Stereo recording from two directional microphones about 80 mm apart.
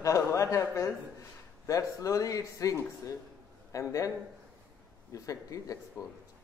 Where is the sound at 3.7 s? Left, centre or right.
Left.